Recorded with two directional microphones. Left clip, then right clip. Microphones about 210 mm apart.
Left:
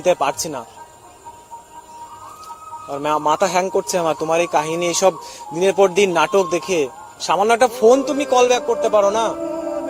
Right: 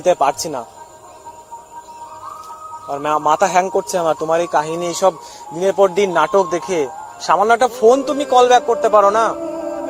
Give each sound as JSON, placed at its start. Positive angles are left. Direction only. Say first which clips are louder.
{"t": 0.0, "sound": "music", "louder": "right 3 dB", "side_deg": -5}
{"t": 3.0, "sound": "a man's voice", "louder": "right 2 dB", "side_deg": 10}
{"t": 8.0, "sound": "music", "louder": "right 3 dB", "side_deg": 5}